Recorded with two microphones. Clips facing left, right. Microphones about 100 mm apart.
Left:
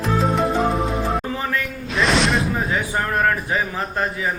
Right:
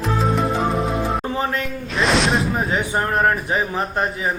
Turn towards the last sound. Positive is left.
turn(degrees=-20)  # may be behind; listen again after turning